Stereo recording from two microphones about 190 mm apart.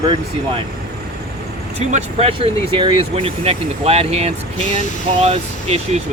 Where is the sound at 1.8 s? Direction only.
35° right (ahead or behind).